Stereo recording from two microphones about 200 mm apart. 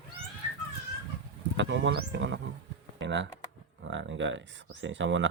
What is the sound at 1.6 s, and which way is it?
Speech, 60° right (ahead or behind).